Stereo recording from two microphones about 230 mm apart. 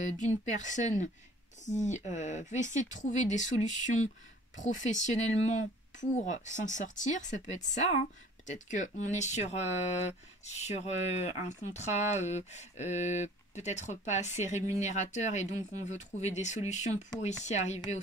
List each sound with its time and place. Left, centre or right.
0.5 s speech: left